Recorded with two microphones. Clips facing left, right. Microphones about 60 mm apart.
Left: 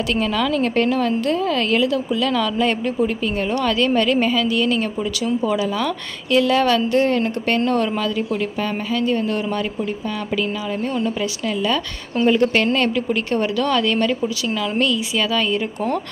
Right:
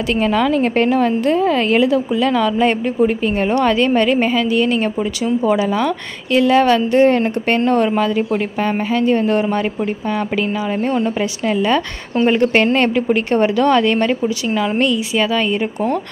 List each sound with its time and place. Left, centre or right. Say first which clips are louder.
0.1 s a woman's voice: right 6 dB; right
7.1 s a woman's voice: right 4 dB; right